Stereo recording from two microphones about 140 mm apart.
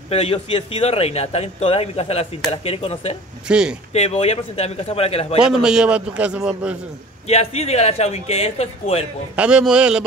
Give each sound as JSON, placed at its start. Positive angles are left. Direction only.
{"t": 0.1, "sound": "speech", "side_deg": 45}
{"t": 3.4, "sound": "a man's voice", "side_deg": -5}
{"t": 3.9, "sound": "speech", "side_deg": 50}
{"t": 5.4, "sound": "a man's voice", "side_deg": -5}
{"t": 7.2, "sound": "speech", "side_deg": 50}
{"t": 9.3, "sound": "a man's voice", "side_deg": -5}